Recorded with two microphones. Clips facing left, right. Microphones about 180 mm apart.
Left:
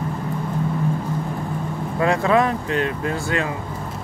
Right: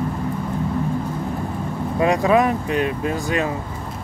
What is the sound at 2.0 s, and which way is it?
Speech, 15° right (ahead or behind).